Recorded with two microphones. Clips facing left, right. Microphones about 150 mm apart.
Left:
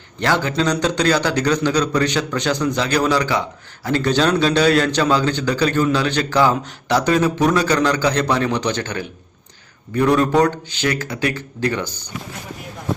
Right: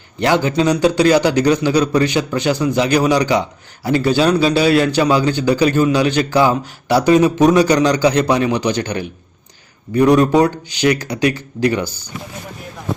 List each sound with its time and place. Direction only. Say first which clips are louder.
0.2 s a man's voice: right 4 dB; 15° right (ahead or behind)